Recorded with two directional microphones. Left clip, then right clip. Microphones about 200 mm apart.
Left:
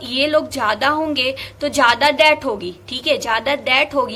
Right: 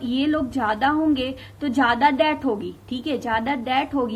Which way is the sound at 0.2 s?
25° right (ahead or behind).